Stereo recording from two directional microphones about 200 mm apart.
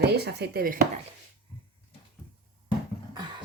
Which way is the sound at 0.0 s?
55° right (ahead or behind).